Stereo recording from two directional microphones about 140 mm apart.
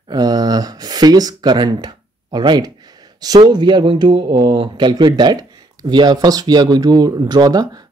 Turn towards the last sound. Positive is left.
turn(degrees=-25)  # may be behind; listen again after turning